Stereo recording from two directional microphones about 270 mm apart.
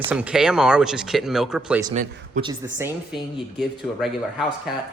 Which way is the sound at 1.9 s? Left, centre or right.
Centre.